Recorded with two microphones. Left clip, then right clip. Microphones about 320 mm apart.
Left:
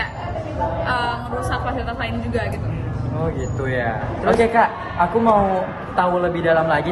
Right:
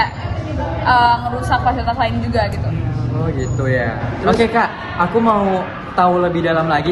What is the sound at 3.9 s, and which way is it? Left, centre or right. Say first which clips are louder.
Speech: right 2 dB; centre.